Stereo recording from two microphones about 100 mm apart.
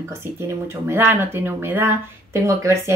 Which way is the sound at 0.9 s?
20° right (ahead or behind).